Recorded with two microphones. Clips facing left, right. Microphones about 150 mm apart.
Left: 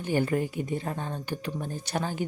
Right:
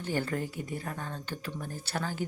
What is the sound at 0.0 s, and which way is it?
Speech, 15° left (ahead or behind).